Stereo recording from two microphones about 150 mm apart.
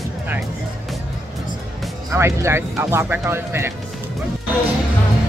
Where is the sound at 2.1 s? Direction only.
20° right (ahead or behind).